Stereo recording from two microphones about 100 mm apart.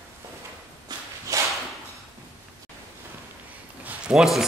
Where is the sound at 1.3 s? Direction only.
35° right (ahead or behind).